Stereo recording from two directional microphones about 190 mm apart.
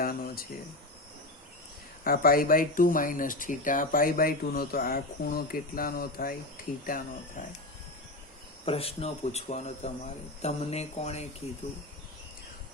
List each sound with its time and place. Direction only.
0.0 s a sound: 50° left (ahead or behind)
2.0 s speech: 50° left (ahead or behind)
8.6 s speech: 30° left (ahead or behind)